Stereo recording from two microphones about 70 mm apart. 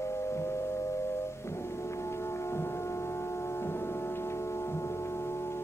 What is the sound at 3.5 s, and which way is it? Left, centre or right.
Foghorn, left.